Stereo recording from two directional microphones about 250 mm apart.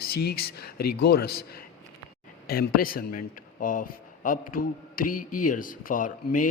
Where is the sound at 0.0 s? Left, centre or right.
Left.